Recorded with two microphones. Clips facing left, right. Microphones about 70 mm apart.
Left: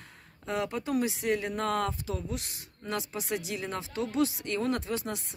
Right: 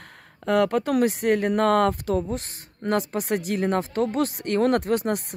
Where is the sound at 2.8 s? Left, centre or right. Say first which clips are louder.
Right 10 dB; right.